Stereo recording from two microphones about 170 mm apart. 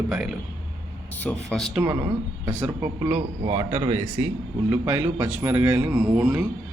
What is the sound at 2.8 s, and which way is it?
Speech, 15° right (ahead or behind).